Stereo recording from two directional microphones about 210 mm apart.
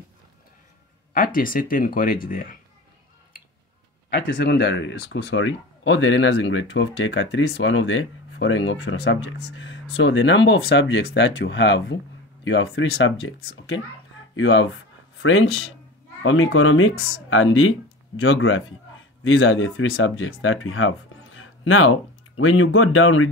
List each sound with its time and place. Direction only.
1.1 s speech: 40° left (ahead or behind)
4.1 s speech: 55° left (ahead or behind)
14.3 s speech: 65° left (ahead or behind)
15.2 s speech: 80° left
16.2 s speech: 70° left (ahead or behind)